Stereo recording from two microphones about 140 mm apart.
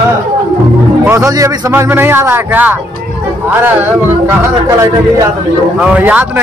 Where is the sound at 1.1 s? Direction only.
25° right (ahead or behind).